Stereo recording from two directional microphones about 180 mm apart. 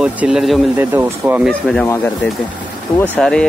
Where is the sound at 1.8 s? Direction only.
15° left (ahead or behind).